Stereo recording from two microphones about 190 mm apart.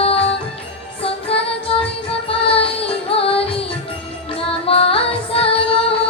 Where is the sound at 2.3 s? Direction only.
30° left (ahead or behind).